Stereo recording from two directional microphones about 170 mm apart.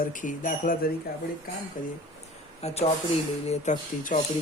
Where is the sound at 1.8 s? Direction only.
55° left (ahead or behind).